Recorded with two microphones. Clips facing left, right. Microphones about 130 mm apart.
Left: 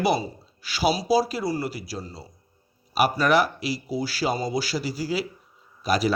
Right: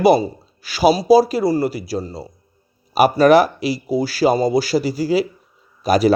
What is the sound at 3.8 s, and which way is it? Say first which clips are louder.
Speech: right 10 dB; 55° right (ahead or behind).